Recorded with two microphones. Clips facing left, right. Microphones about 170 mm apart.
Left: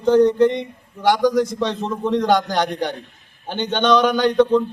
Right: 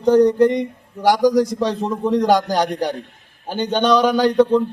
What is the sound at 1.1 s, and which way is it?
Speech, 10° right (ahead or behind).